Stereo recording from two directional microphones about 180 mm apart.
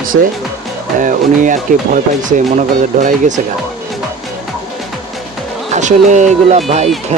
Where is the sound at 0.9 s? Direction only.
45° right (ahead or behind).